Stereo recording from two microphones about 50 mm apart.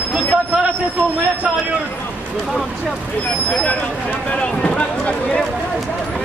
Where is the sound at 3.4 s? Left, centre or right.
Left.